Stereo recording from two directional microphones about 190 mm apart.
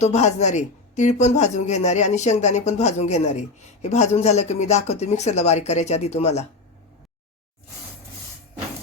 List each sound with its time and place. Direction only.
0.0 s speech: 35° left (ahead or behind)